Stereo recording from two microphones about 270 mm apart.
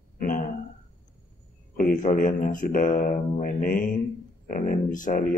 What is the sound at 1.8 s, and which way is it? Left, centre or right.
Speech, left.